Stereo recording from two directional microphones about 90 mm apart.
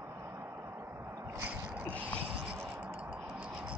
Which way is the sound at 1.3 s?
20° right (ahead or behind).